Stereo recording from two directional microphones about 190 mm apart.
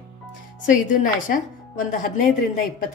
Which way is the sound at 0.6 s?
45° left (ahead or behind).